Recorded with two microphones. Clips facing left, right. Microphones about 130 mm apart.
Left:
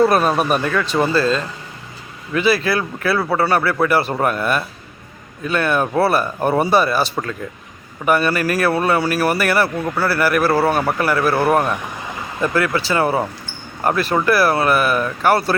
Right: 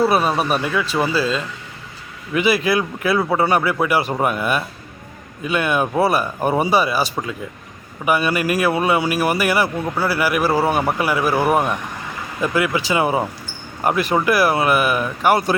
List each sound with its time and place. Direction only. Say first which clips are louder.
0.0 s speech: left 2 dB; 5° right (ahead or behind)